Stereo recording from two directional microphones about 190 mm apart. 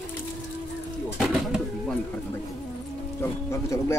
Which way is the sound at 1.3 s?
5° right (ahead or behind).